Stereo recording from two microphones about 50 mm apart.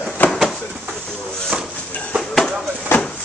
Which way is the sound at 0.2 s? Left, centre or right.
Left.